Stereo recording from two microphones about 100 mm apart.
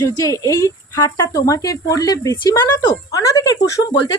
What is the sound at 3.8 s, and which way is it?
Speech, 50° left (ahead or behind).